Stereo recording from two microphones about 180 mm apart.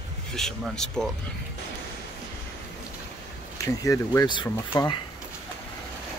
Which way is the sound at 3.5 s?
15° left (ahead or behind).